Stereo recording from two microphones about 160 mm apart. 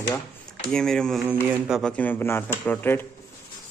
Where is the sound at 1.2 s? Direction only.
10° right (ahead or behind).